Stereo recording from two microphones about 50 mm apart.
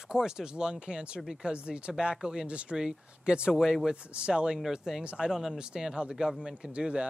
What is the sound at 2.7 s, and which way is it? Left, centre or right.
Speech, centre.